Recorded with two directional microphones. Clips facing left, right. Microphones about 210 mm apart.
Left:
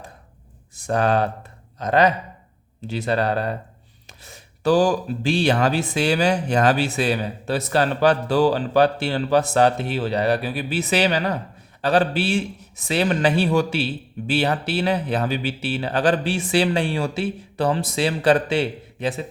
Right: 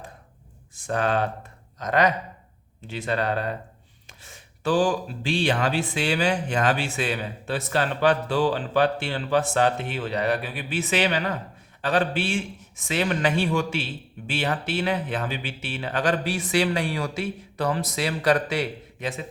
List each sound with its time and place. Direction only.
0.8 s a man's voice: 40° left (ahead or behind)